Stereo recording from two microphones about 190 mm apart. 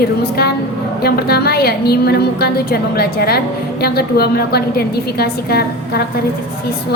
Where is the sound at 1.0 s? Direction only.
55° left (ahead or behind).